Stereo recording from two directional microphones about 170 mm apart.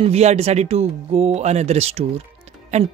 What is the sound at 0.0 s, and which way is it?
Speech, 40° right (ahead or behind).